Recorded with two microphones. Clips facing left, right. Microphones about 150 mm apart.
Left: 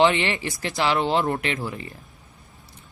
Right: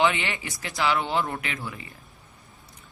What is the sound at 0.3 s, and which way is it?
Speech, 45° left (ahead or behind).